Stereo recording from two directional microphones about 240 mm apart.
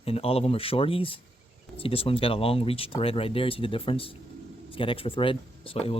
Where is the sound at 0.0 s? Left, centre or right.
Left.